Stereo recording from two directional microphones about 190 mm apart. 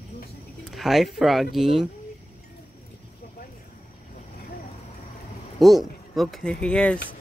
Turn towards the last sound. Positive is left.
turn(degrees=5)  # may be behind; listen again after turning